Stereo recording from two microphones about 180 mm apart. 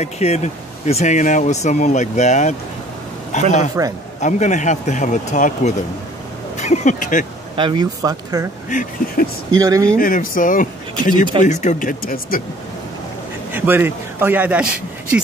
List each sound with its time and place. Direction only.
0.0 s speech: 35° left (ahead or behind)
7.5 s speech: 25° right (ahead or behind)
8.6 s speech: 50° left (ahead or behind)
9.5 s speech: 20° right (ahead or behind)
9.9 s speech: 50° left (ahead or behind)
13.5 s a man's voice: 10° right (ahead or behind)